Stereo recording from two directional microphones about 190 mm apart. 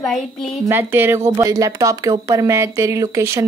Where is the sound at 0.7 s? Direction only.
10° right (ahead or behind).